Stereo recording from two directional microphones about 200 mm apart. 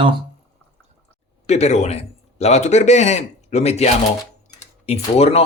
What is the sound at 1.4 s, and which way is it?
A man's voice, 35° left (ahead or behind).